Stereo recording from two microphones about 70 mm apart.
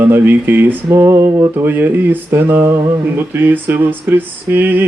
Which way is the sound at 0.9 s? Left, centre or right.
Right.